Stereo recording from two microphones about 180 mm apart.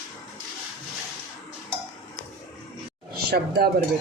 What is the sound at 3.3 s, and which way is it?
Speech, 60° right (ahead or behind).